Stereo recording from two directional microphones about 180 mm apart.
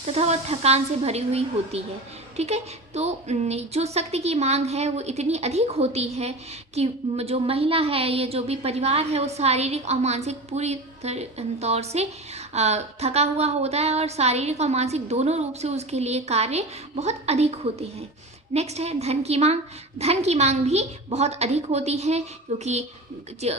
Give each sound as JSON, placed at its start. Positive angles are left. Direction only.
{"t": 0.0, "sound": "a woman's voice", "side_deg": -35}